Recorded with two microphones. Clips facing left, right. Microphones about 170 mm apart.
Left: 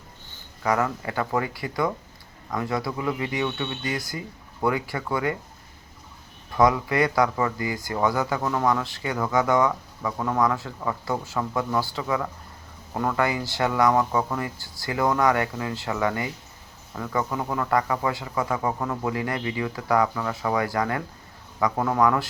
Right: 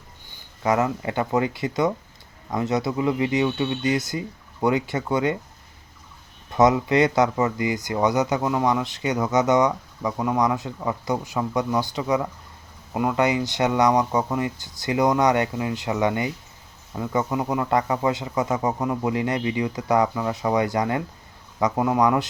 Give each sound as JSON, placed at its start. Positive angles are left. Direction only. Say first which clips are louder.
{"t": 0.3, "sound": "speech", "louder": "right 2 dB", "side_deg": -15}
{"t": 6.5, "sound": "speech", "louder": "right 3 dB", "side_deg": -20}